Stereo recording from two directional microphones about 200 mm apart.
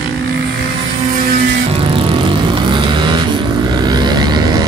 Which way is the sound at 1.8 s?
25° right (ahead or behind).